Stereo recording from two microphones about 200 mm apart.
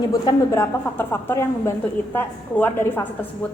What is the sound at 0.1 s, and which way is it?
A woman's voice, 15° left (ahead or behind).